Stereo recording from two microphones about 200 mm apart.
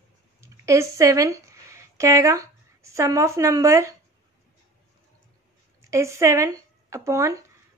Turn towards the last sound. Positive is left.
turn(degrees=-15)  # may be behind; listen again after turning